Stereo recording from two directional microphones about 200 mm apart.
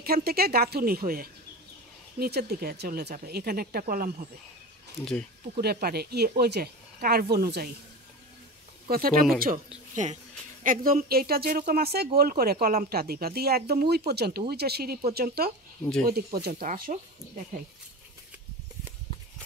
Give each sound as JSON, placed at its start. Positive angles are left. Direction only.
{"t": 0.0, "sound": "speech", "side_deg": -50}
{"t": 5.6, "sound": "speech", "side_deg": -50}
{"t": 8.8, "sound": "speech", "side_deg": -45}
{"t": 10.6, "sound": "speech", "side_deg": -45}